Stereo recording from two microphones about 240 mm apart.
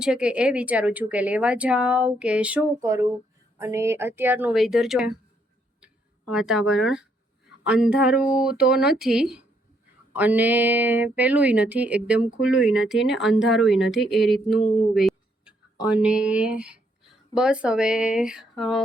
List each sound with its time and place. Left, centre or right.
0.0 s speech: centre
6.3 s speech: centre
14.4 s speech: left
14.9 s speech: centre